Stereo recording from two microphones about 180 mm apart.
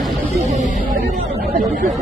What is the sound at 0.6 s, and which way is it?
Music, 45° left (ahead or behind).